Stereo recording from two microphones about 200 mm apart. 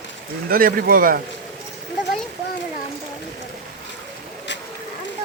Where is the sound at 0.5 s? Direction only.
45° right (ahead or behind).